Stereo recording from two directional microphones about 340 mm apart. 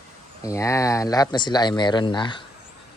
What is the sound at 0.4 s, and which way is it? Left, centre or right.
Speech, centre.